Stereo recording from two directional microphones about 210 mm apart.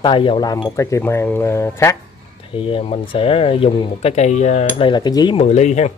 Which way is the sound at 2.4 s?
25° left (ahead or behind).